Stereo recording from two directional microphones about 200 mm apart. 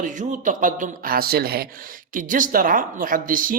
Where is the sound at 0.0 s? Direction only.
40° right (ahead or behind).